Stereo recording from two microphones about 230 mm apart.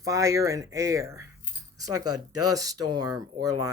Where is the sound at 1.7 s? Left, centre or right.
Right.